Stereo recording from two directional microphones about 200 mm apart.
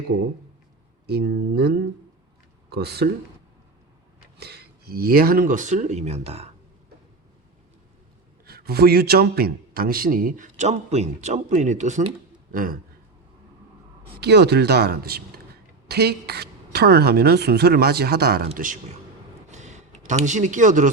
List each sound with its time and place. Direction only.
1.0 s a man's voice: 55° right (ahead or behind)
4.4 s speech: 55° right (ahead or behind); by 6.5 s 30° right (ahead or behind)
8.4 s a man's voice: 50° right (ahead or behind)
14.2 s a man's voice: 55° right (ahead or behind)
19.5 s a sound: 35° right (ahead or behind)